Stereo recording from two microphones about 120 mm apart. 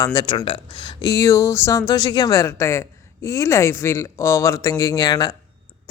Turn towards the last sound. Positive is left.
turn(degrees=35)  # may be behind; listen again after turning